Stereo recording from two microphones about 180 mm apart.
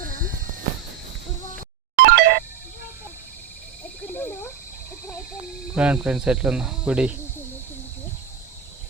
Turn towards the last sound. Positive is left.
turn(degrees=-5)  # may be behind; listen again after turning